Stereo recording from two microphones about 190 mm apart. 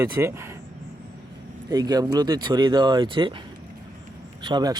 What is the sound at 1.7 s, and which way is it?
Speech, 20° right (ahead or behind).